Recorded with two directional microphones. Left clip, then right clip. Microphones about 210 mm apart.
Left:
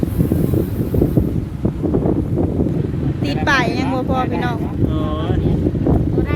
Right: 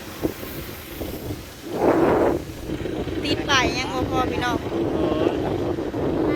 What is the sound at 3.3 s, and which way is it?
Speech, 10° left (ahead or behind).